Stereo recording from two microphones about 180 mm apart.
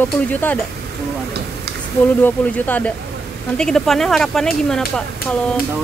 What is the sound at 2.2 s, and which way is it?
Speech, 10° left (ahead or behind).